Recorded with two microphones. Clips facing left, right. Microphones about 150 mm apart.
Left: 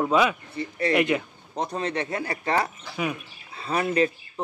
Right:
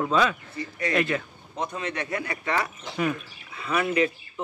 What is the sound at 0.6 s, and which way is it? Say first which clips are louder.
Speech: left 4 dB; 25° left (ahead or behind).